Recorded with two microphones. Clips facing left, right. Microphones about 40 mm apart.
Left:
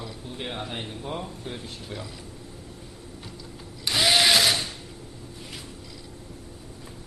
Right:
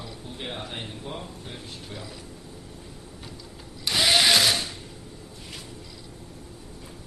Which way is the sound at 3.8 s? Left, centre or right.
Centre.